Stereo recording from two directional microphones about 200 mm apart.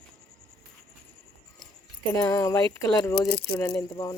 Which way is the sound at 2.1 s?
15° left (ahead or behind).